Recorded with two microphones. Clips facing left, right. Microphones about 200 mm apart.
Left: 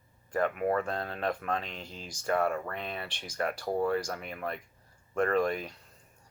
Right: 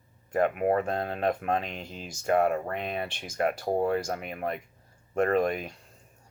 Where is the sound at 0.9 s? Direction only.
45° right (ahead or behind).